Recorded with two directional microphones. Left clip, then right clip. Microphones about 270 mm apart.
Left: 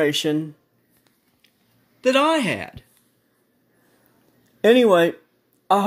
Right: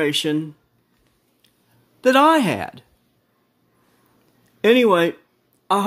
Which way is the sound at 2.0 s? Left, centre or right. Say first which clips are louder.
Right 4 dB; centre.